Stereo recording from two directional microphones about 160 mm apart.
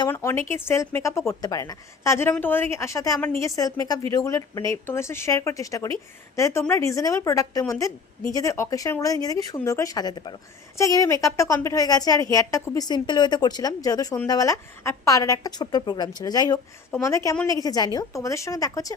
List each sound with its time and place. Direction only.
0.1 s speech: 15° left (ahead or behind)